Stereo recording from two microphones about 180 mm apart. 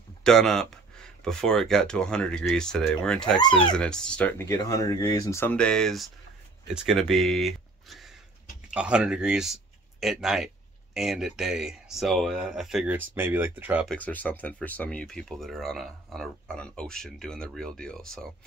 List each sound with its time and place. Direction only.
0.2 s speech: centre (ahead or behind)
3.3 s speech: 25° left (ahead or behind)
3.7 s speech: 5° left (ahead or behind)
13.8 s speech: 10° left (ahead or behind)